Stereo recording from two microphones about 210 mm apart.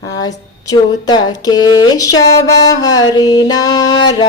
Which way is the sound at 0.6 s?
15° left (ahead or behind).